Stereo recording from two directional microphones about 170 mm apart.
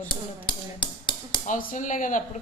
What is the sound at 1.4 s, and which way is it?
Speech, 45° left (ahead or behind).